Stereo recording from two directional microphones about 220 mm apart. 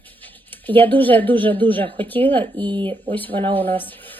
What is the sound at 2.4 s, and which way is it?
Speech, 20° right (ahead or behind).